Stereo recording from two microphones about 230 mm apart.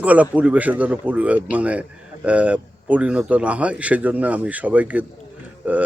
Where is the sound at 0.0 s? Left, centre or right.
Centre.